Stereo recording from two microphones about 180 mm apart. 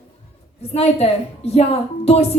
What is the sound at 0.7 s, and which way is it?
Speech, 35° left (ahead or behind).